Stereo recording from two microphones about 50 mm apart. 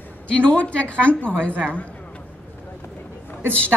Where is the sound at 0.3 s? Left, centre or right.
Left.